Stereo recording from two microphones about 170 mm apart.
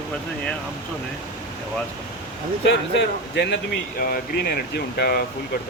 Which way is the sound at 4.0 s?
65° left (ahead or behind).